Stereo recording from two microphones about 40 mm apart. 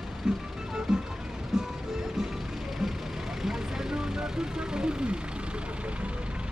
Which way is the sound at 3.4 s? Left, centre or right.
Centre.